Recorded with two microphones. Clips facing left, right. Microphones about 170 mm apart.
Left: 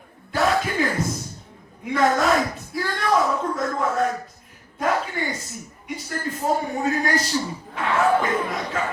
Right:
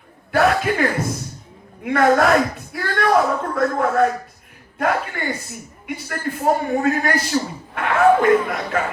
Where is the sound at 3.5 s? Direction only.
60° right (ahead or behind).